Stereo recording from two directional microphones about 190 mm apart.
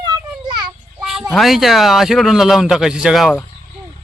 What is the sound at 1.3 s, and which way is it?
A man's voice, centre (ahead or behind).